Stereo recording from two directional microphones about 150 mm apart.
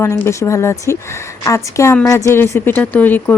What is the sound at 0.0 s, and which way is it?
A woman's voice, 20° left (ahead or behind).